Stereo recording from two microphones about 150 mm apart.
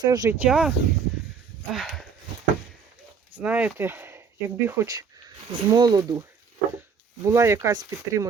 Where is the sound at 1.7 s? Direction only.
Centre (ahead or behind).